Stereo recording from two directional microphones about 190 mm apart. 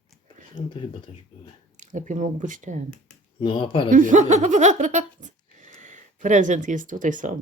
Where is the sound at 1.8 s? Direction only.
40° right (ahead or behind).